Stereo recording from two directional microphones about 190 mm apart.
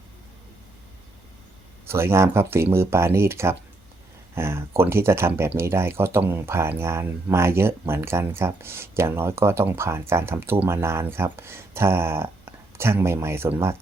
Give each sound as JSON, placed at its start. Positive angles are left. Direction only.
{"t": 1.9, "sound": "speech", "side_deg": -15}